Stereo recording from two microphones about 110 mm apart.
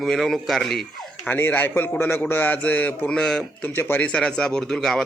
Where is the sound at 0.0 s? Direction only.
5° left (ahead or behind).